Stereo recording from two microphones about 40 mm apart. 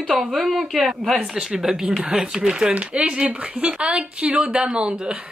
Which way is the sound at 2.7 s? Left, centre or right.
Right.